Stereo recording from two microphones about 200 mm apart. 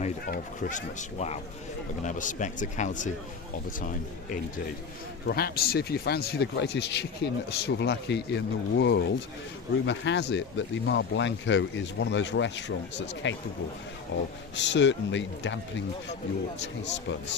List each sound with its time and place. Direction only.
0.3 s speech: 40° left (ahead or behind); by 15.5 s 65° left (ahead or behind)
16.6 s speech: 60° left (ahead or behind)